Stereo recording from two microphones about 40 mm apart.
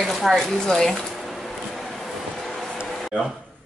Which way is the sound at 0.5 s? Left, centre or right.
Centre.